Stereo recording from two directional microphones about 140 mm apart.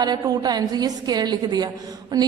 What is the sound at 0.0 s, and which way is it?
A woman's voice, 30° right (ahead or behind).